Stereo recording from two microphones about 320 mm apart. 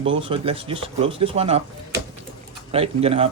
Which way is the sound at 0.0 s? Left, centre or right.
Centre.